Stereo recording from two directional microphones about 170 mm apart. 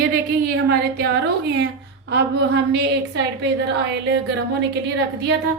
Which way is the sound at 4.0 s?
90° right.